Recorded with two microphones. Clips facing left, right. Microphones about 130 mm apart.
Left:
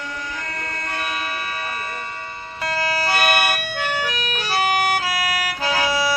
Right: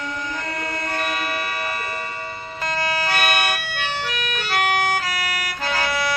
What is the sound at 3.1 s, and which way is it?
Emergency vehicle, 10° left (ahead or behind).